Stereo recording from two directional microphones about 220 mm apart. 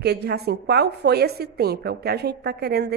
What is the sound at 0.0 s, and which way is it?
Speech, 45° right (ahead or behind).